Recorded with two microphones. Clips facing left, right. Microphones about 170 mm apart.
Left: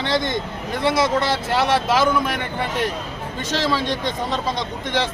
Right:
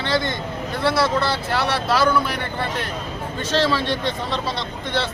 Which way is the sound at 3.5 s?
15° left (ahead or behind).